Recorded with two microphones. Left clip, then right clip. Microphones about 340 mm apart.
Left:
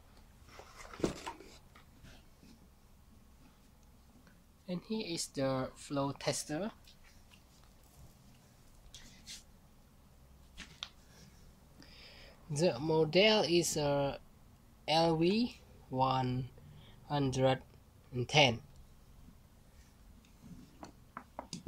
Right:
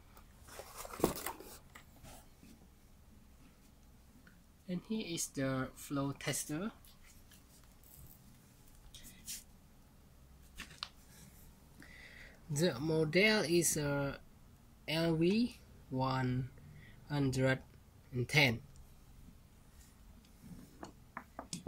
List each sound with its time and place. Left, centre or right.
4.6 s speech: centre
12.6 s speech: centre
13.5 s speech: left
13.7 s speech: centre
20.8 s a sound: centre